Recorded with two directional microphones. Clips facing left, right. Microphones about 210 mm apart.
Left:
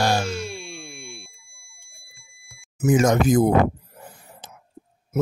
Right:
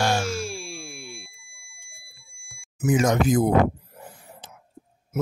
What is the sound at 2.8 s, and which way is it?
Speech, 45° left (ahead or behind).